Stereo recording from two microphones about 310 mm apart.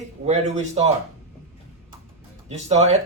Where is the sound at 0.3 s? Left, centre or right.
Right.